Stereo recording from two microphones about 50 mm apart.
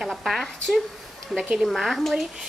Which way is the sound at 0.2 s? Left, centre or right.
Centre.